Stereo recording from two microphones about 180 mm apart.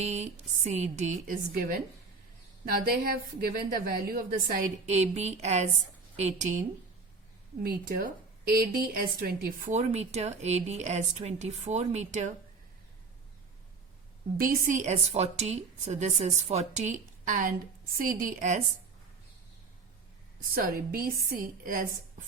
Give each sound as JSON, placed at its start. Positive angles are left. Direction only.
{"t": 0.0, "sound": "a woman's voice", "side_deg": -40}
{"t": 7.6, "sound": "a woman's voice", "side_deg": -55}
{"t": 9.7, "sound": "a woman's voice", "side_deg": -40}
{"t": 14.3, "sound": "a woman's voice", "side_deg": -50}
{"t": 20.4, "sound": "a woman's voice", "side_deg": -55}